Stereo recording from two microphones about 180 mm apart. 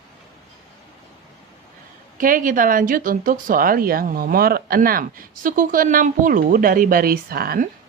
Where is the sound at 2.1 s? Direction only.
50° right (ahead or behind).